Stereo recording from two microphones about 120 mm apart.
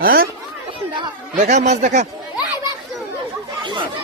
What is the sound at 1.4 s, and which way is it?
Speech, 80° right.